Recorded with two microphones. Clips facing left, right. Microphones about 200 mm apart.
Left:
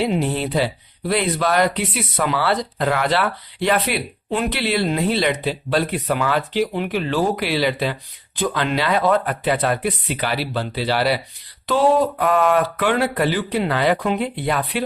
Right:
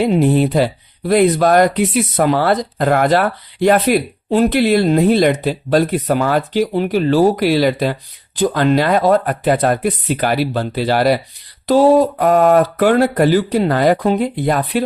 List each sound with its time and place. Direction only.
0.0 s speech: 50° right (ahead or behind)